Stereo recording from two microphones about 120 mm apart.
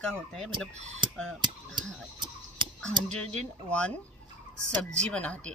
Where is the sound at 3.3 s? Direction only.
10° left (ahead or behind).